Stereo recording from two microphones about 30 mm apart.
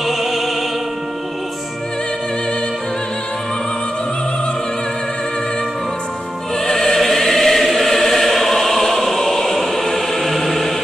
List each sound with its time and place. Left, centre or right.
0.0 s music: centre
6.6 s music: centre
7.0 s choir: centre